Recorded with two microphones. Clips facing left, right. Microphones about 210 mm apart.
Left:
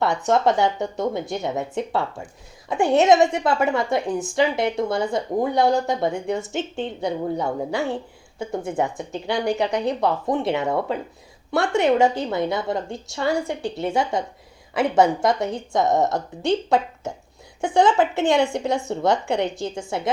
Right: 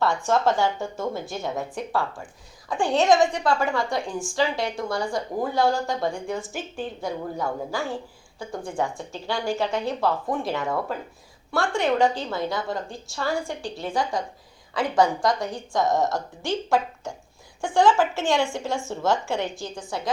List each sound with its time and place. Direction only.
0.0 s speech: 20° left (ahead or behind)